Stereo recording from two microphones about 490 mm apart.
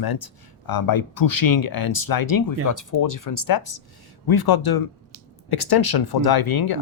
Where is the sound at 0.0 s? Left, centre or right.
Left.